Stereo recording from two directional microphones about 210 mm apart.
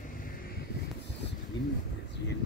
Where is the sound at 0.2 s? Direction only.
45° left (ahead or behind).